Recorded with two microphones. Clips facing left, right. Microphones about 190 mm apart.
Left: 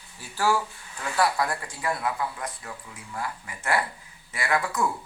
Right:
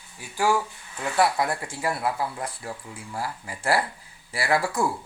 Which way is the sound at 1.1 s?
25° right (ahead or behind).